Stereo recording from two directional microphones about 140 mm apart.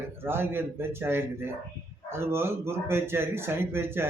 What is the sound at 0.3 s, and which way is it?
Speech, 15° right (ahead or behind).